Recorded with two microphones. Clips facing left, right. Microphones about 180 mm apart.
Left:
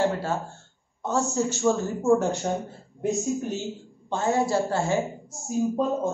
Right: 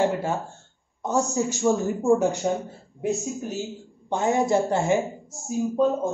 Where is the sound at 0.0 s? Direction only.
15° right (ahead or behind).